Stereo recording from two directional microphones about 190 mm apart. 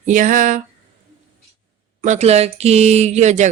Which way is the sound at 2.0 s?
35° right (ahead or behind).